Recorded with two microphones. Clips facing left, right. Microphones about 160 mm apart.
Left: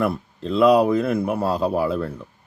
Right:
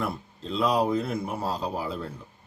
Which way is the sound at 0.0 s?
65° left (ahead or behind).